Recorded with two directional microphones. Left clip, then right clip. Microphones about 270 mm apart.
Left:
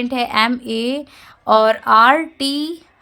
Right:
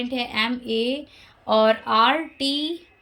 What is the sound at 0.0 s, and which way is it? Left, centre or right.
A woman's voice, centre.